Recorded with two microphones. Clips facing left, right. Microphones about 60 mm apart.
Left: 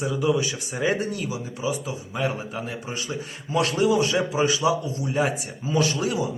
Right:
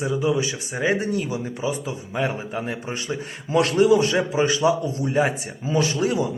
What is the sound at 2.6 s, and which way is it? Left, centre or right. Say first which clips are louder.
Speech: right 3 dB; right.